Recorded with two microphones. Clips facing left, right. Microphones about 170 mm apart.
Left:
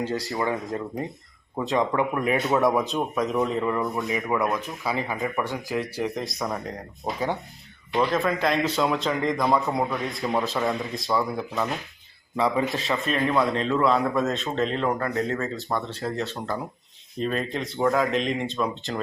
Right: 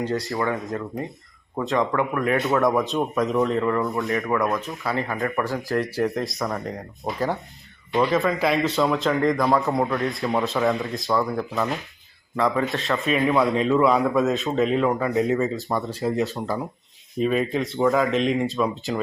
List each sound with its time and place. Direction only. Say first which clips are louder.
0.1 s speech: right 2 dB; 20° left (ahead or behind)
2.4 s a man's voice: even; centre (ahead or behind)